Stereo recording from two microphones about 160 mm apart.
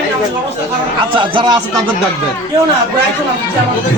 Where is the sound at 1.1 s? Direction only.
30° right (ahead or behind).